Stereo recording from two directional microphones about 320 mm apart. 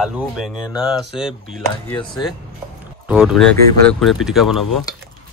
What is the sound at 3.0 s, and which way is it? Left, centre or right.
Boat, centre.